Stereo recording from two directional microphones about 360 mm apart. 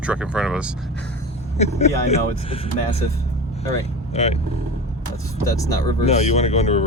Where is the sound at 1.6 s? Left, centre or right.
Centre.